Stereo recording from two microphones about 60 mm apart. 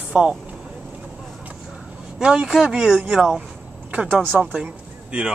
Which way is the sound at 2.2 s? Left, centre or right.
Centre.